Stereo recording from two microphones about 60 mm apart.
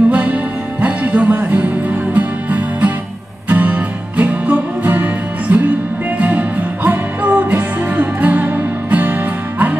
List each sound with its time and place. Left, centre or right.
0.1 s music: right